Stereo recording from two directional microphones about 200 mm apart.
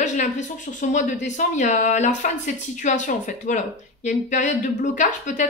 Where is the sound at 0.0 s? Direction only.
35° left (ahead or behind).